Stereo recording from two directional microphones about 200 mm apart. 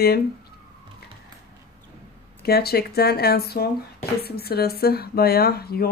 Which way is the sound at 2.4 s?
50° left (ahead or behind).